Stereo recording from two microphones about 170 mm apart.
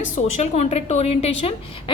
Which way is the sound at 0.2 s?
45° left (ahead or behind).